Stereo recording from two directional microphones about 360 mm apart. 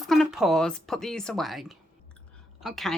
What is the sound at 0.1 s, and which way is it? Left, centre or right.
A woman's voice, centre.